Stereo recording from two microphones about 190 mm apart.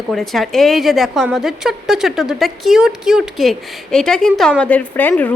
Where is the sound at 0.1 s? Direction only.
Centre (ahead or behind).